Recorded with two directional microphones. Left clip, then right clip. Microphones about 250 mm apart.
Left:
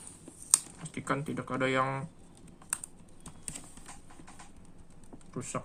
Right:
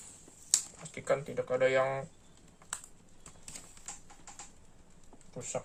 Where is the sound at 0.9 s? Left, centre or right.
Centre.